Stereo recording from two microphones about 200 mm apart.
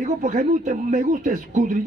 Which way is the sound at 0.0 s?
40° right (ahead or behind).